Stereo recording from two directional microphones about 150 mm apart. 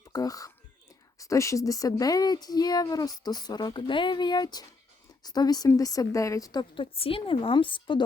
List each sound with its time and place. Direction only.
0.1 s whispering: 25° left (ahead or behind)
1.2 s speech: 20° left (ahead or behind)